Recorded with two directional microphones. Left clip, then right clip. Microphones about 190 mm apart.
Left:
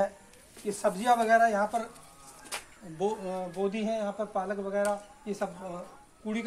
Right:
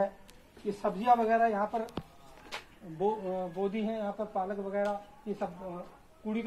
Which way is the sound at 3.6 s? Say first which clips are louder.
Left 6 dB; 5° left (ahead or behind).